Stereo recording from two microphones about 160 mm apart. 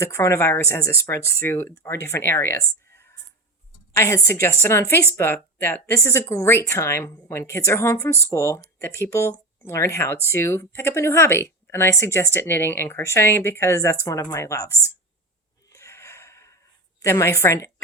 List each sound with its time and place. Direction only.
0.0 s speech: 15° left (ahead or behind)
3.9 s a woman's voice: 15° left (ahead or behind)
15.7 s snort: 15° left (ahead or behind)
17.0 s speech: 15° left (ahead or behind)